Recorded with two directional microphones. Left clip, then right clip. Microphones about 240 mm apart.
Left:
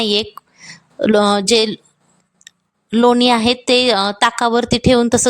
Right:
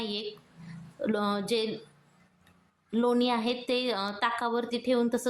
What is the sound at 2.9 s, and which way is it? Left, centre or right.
A woman's voice, left.